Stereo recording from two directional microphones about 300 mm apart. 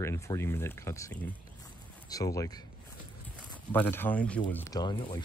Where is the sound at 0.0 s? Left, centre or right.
Centre.